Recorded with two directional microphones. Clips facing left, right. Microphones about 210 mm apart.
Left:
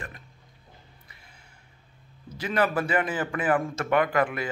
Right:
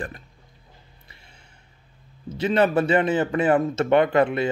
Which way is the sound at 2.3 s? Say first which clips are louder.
Right 6 dB; 25° right (ahead or behind).